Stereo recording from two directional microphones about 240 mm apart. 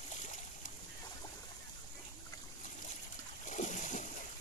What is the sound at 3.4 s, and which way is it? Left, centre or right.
Splash, left.